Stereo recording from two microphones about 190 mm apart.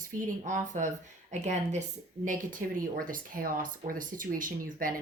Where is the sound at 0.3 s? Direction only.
40° right (ahead or behind).